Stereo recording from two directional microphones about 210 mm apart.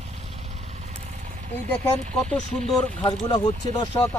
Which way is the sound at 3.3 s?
15° left (ahead or behind).